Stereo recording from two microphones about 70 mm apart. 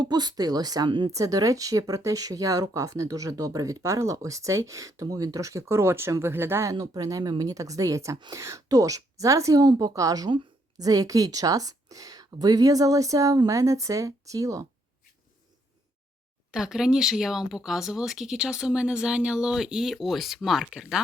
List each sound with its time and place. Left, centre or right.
0.0 s speech: right
1.1 s speech: right
6.7 s speech: right
16.5 s speech: centre